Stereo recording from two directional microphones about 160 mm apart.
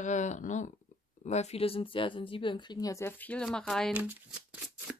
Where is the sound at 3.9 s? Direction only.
10° right (ahead or behind).